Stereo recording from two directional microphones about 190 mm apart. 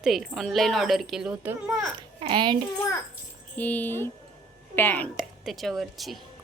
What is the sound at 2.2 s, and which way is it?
Speech, 25° right (ahead or behind).